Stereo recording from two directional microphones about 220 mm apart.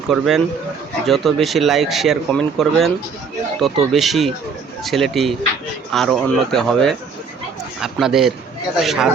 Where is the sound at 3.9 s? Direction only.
Centre (ahead or behind).